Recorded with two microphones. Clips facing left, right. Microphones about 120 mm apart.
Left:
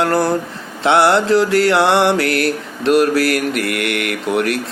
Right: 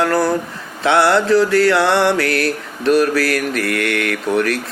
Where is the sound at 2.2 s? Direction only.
35° right (ahead or behind).